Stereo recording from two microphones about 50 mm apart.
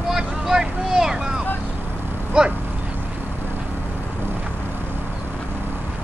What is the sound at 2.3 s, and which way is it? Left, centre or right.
Speech, right.